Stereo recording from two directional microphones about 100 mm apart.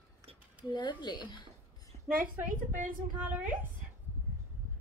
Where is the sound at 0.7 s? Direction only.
50° left (ahead or behind).